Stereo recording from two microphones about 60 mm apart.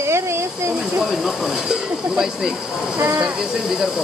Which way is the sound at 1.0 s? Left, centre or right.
Centre.